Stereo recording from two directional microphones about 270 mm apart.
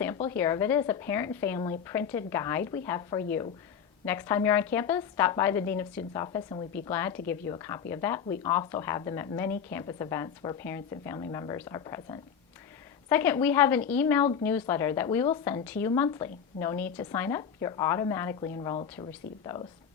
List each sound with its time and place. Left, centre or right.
0.3 s a woman's voice: centre